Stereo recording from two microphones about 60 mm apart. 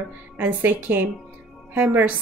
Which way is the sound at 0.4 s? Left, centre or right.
Right.